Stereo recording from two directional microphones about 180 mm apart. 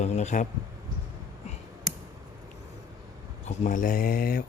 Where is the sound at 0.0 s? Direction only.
40° left (ahead or behind).